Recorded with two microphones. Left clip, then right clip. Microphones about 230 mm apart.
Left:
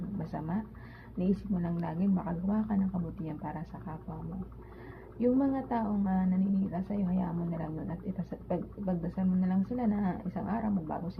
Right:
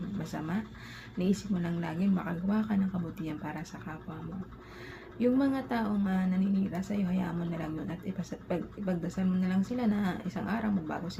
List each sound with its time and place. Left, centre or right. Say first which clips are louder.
0.2 s speech: right 1 dB; centre
5.2 s speech: even; centre